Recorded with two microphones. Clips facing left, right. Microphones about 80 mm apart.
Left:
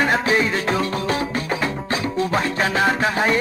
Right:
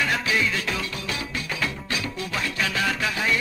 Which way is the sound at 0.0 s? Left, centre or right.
Left.